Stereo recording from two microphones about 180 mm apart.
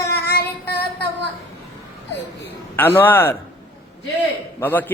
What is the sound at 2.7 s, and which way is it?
Speech, 10° left (ahead or behind).